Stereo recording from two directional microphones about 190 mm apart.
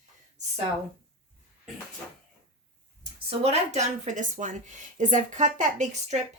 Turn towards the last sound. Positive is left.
turn(degrees=-35)  # may be behind; listen again after turning